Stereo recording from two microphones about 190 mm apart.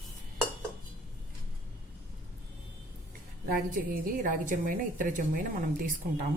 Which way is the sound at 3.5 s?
45° right (ahead or behind).